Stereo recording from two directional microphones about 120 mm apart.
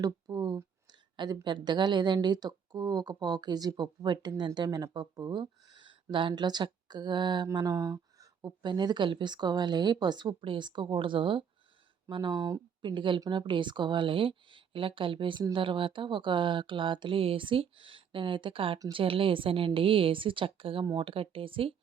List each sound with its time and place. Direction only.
0.0 s speech: 35° right (ahead or behind)